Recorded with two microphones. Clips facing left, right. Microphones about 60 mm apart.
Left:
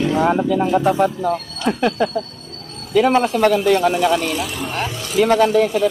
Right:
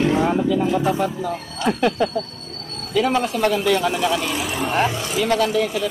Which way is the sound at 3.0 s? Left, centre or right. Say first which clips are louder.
Left 5 dB; left.